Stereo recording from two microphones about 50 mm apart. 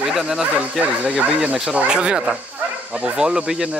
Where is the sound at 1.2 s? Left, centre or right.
Right.